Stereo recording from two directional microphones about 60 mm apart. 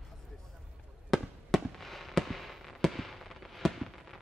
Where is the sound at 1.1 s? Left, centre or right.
Centre.